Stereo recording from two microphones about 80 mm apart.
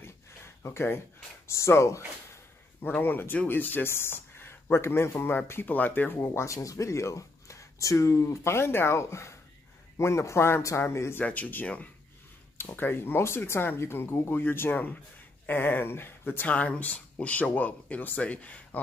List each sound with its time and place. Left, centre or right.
0.6 s speech: left
2.8 s speech: left
11.1 s speech: centre